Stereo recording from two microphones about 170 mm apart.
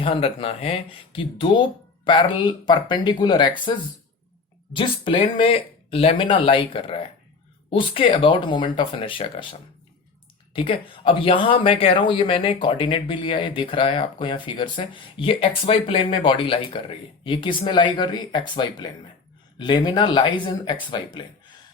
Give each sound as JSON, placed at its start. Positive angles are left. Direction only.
{"t": 0.0, "sound": "speech", "side_deg": 30}